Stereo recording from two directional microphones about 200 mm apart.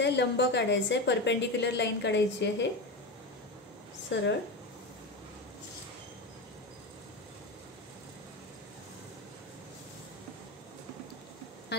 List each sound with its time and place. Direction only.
0.0 s a woman's voice: 60° left (ahead or behind)
4.1 s a woman's voice: 60° left (ahead or behind)